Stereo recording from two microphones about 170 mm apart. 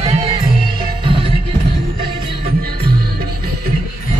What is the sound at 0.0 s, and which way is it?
Music, 35° right (ahead or behind).